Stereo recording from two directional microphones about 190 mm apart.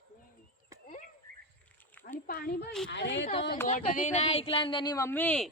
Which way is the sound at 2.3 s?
50° left (ahead or behind).